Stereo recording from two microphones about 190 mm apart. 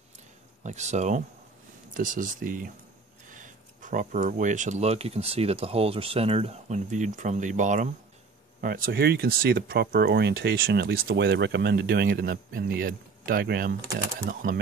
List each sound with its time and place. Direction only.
0.7 s speech: 35° right (ahead or behind); by 13.7 s 55° right (ahead or behind)